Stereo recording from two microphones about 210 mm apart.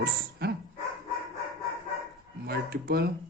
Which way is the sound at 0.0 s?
50° right (ahead or behind).